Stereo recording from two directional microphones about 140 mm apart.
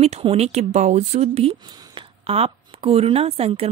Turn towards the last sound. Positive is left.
turn(degrees=-45)  # may be behind; listen again after turning